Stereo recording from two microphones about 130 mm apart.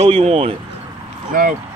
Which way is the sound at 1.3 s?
90° right.